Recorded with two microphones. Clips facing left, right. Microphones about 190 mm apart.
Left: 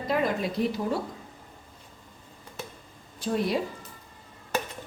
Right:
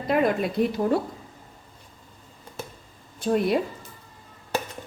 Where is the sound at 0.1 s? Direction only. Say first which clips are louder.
Right 5 dB; 55° right (ahead or behind).